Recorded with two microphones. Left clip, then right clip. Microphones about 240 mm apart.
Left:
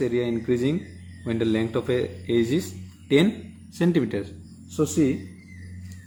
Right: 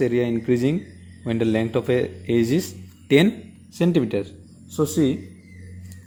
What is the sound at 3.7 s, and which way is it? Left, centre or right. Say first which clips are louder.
Speech: right 3 dB; centre.